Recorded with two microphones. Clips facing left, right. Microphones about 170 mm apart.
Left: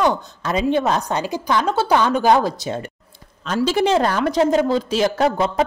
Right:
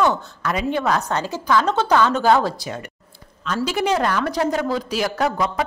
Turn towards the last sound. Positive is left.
turn(degrees=25)  # may be behind; listen again after turning